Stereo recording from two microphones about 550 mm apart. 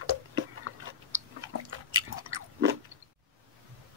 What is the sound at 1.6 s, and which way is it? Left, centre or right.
Chewing, right.